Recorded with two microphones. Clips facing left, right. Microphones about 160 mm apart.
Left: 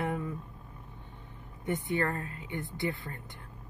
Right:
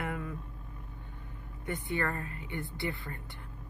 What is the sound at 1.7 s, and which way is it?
Speech, 20° left (ahead or behind).